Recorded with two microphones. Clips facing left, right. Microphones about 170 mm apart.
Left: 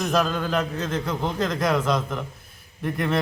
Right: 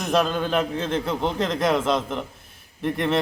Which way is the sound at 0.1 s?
25° right (ahead or behind).